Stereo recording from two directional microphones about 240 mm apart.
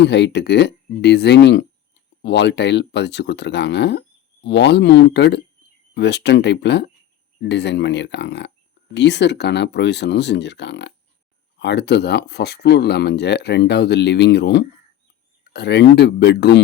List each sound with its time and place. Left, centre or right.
0.0 s speech: left